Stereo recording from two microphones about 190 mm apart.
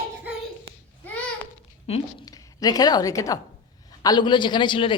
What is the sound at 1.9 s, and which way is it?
A woman's voice, 25° left (ahead or behind).